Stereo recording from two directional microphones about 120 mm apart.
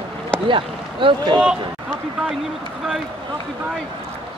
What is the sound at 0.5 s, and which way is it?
Speech, 45° right (ahead or behind).